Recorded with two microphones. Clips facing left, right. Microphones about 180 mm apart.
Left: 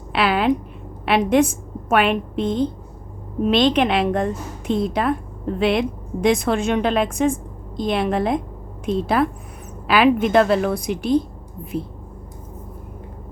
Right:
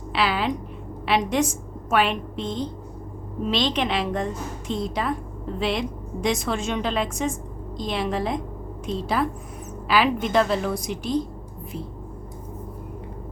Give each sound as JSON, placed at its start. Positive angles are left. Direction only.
{"t": 0.1, "sound": "a woman's voice", "side_deg": 55}